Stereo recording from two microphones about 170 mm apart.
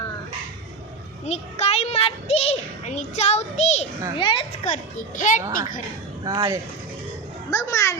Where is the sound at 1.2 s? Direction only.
40° left (ahead or behind).